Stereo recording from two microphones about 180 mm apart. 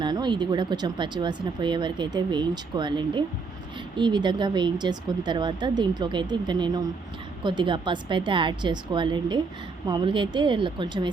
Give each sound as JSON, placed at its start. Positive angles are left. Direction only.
{"t": 0.0, "sound": "speech", "side_deg": -25}